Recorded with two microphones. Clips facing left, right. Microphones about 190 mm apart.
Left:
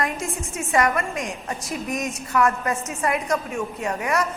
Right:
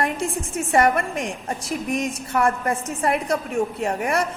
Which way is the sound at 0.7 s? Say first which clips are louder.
Right 3 dB; 30° right (ahead or behind).